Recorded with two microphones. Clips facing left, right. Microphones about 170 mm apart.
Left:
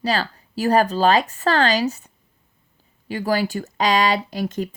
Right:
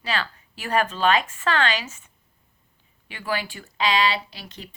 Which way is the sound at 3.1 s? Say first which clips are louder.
Left 8 dB; 40° left (ahead or behind).